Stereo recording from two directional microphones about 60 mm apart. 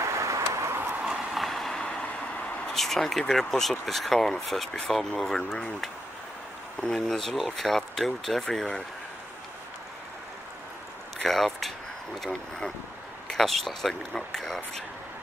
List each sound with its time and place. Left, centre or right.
0.0 s vehicle: right
1.0 s vehicle: centre
2.7 s speech: centre
6.8 s speech: centre
11.2 s speech: centre